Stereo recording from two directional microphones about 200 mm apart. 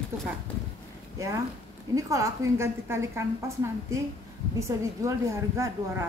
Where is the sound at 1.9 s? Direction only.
15° right (ahead or behind).